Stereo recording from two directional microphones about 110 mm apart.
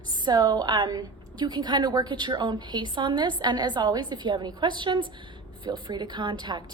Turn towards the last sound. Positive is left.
turn(degrees=-45)  # may be behind; listen again after turning